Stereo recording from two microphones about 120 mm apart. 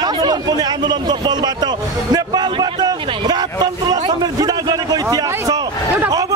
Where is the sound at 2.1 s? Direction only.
35° right (ahead or behind).